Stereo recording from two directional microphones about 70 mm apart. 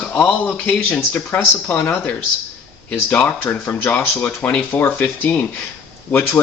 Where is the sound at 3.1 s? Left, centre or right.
Left.